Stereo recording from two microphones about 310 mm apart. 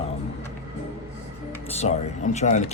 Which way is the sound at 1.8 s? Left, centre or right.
Left.